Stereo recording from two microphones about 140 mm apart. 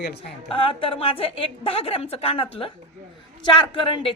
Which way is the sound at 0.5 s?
40° left (ahead or behind).